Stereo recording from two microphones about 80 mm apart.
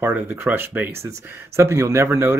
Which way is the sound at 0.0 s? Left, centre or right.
Right.